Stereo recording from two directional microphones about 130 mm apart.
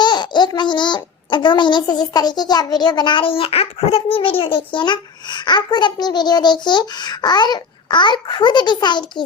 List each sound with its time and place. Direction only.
0.0 s a child's voice: 35° left (ahead or behind)